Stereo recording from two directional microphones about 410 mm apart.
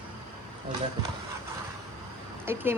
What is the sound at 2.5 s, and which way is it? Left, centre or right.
Speech, centre.